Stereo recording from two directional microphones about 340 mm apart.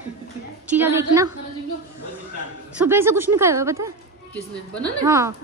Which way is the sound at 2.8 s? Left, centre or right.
Centre.